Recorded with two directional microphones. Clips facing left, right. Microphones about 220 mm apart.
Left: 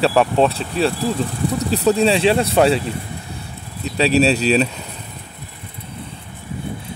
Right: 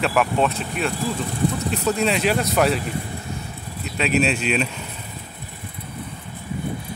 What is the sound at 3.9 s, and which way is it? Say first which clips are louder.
Speech: left 5 dB; 35° left (ahead or behind).